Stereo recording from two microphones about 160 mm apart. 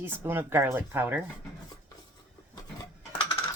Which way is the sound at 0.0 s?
15° right (ahead or behind).